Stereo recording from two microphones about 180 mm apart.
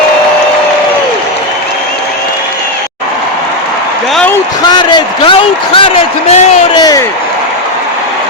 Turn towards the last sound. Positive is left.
turn(degrees=20)  # may be behind; listen again after turning